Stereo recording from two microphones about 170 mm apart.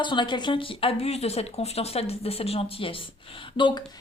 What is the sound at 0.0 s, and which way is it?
A woman's voice, 25° left (ahead or behind).